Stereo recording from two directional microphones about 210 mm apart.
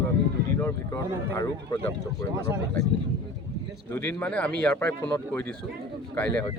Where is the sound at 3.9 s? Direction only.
10° left (ahead or behind).